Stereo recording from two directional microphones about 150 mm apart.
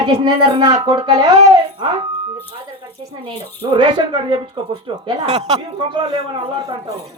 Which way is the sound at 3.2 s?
30° right (ahead or behind).